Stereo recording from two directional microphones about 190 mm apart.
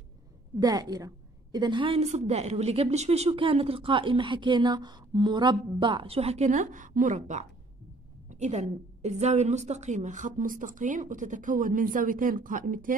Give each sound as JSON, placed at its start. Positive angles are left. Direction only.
{"t": 0.6, "sound": "a woman's voice", "side_deg": -20}